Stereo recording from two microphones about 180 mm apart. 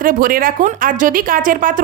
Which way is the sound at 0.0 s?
50° right (ahead or behind).